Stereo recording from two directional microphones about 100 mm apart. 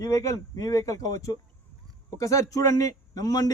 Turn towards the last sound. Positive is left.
turn(degrees=40)  # may be behind; listen again after turning